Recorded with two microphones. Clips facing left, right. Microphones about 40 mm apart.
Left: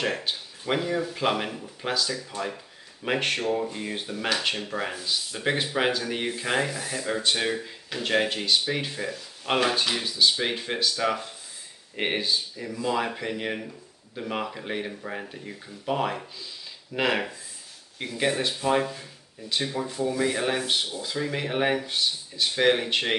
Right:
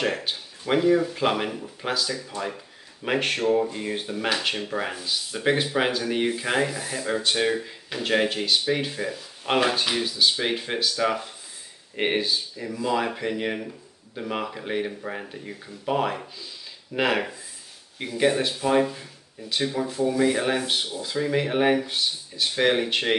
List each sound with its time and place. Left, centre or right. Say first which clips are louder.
0.0 s speech: right 2 dB; centre